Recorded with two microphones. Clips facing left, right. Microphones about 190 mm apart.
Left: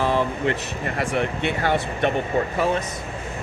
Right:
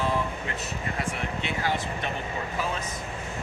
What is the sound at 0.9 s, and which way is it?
Speech, 65° left (ahead or behind).